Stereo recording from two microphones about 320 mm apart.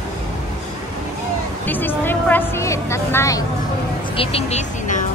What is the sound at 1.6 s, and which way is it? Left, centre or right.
Speech, centre.